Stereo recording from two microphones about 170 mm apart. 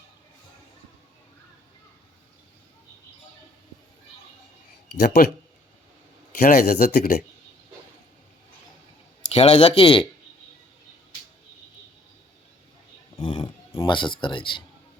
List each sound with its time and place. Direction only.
4.9 s speech: 65° left (ahead or behind)
6.4 s speech: 60° left (ahead or behind)
9.3 s speech: 35° left (ahead or behind)
13.1 s a sound: 30° left (ahead or behind)